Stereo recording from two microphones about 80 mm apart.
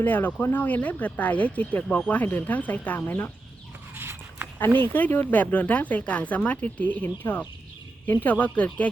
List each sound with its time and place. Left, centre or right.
0.0 s speech: left
3.9 s a sound: right
4.9 s speech: left